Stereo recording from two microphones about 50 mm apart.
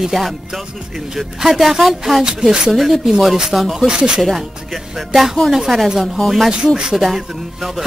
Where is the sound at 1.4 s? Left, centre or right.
Centre.